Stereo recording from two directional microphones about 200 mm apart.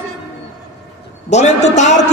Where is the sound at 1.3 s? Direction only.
35° left (ahead or behind).